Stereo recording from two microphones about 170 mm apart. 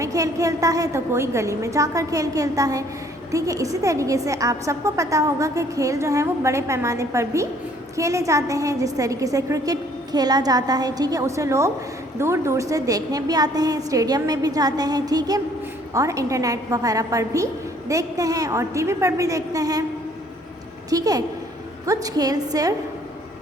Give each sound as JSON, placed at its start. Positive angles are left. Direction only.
{"t": 0.0, "sound": "a woman's voice", "side_deg": -20}
{"t": 20.9, "sound": "a woman's voice", "side_deg": -20}